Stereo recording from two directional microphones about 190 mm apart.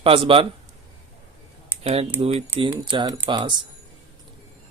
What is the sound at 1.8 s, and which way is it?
Speech, 30° right (ahead or behind).